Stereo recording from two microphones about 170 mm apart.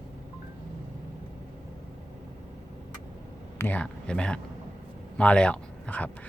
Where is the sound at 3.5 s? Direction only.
10° left (ahead or behind).